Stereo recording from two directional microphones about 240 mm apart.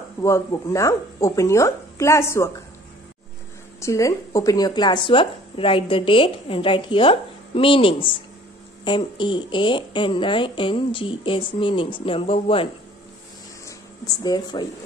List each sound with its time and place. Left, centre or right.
0.2 s speech: centre
3.8 s speech: centre
13.7 s a sound: centre